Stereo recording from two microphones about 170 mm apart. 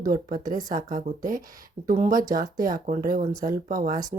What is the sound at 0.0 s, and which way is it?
Speech, 55° right (ahead or behind).